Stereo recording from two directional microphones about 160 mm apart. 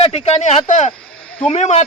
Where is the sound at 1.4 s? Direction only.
40° left (ahead or behind).